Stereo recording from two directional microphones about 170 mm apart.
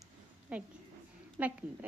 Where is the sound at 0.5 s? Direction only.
5° right (ahead or behind).